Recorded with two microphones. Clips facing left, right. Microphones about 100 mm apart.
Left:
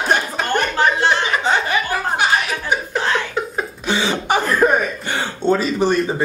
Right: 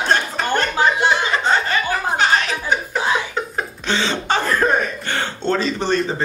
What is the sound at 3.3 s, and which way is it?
Speech, 10° left (ahead or behind).